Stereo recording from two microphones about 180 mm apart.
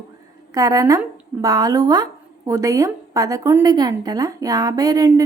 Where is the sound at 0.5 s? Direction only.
20° right (ahead or behind).